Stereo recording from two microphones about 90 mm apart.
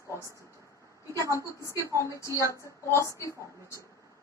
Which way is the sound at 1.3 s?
35° left (ahead or behind).